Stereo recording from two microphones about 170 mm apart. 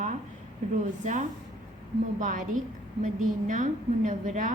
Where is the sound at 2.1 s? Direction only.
50° right (ahead or behind).